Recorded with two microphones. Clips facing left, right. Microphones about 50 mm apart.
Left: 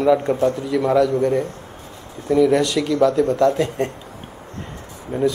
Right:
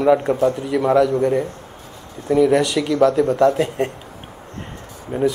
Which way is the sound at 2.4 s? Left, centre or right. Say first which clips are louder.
Right 1 dB; centre.